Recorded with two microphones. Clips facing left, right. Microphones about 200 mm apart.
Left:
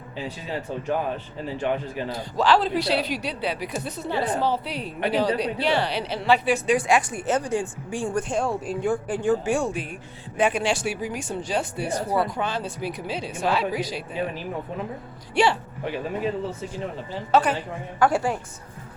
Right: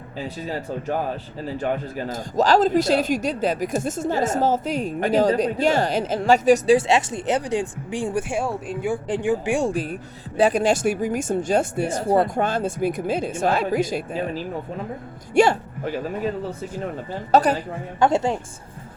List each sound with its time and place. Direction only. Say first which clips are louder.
0.4 s speech: right 1 dB; 40° right (ahead or behind)
6.7 s speech: right 2 dB; 25° right (ahead or behind); by 9.0 s 5° right (ahead or behind)
9.0 s speech: right 1 dB; 15° right (ahead or behind)
9.6 s speech: right 5 dB; 35° right (ahead or behind)
15.4 s speech: right 5 dB; 45° right (ahead or behind)
18.0 s a woman's voice: right 2 dB; 25° right (ahead or behind)